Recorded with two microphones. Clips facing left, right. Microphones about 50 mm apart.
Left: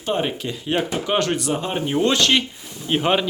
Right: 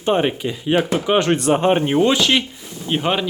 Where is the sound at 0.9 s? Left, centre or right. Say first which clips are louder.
Right 4 dB; right.